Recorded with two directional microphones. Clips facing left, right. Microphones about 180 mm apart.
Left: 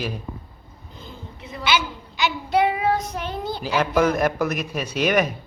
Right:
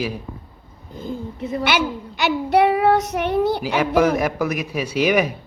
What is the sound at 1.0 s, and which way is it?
A child's voice, 50° right (ahead or behind).